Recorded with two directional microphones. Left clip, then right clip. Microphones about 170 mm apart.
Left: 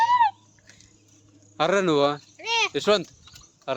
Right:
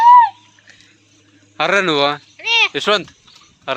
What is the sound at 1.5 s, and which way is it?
Speech, 10° left (ahead or behind).